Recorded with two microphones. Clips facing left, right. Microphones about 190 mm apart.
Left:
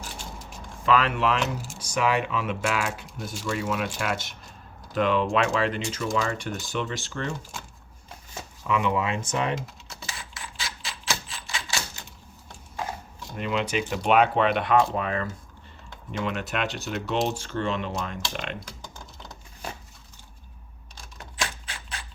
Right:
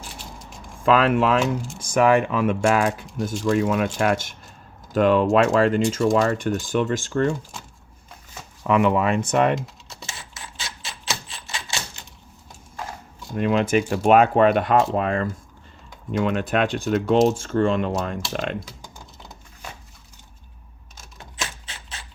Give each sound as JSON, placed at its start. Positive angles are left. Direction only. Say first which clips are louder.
{"t": 0.9, "sound": "speech", "louder": "right 5 dB", "side_deg": -50}
{"t": 8.6, "sound": "speech", "louder": "right 6 dB", "side_deg": -55}
{"t": 9.6, "sound": "typing", "louder": "right 3 dB", "side_deg": 0}
{"t": 10.3, "sound": "typewriter", "louder": "even", "side_deg": -25}
{"t": 13.3, "sound": "speech", "louder": "right 7 dB", "side_deg": -50}